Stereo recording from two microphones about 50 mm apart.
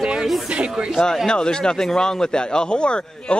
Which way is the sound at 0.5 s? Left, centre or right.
Right.